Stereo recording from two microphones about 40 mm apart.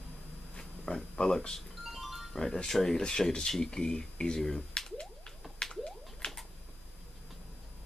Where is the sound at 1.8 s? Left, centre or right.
Centre.